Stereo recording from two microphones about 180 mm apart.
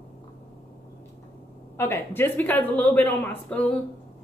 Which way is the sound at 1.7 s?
15° left (ahead or behind).